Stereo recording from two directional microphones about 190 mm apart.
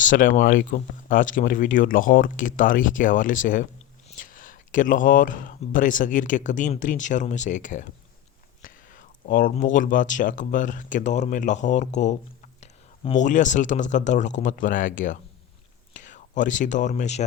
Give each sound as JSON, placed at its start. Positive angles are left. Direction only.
{"t": 0.0, "sound": "speech", "side_deg": 45}
{"t": 8.6, "sound": "whispering", "side_deg": 45}
{"t": 9.7, "sound": "speech", "side_deg": 45}